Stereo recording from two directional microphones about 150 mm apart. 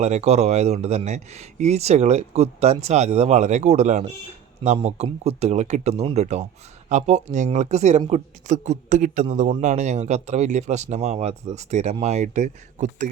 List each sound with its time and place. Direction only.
0.0 s speech: 50° right (ahead or behind)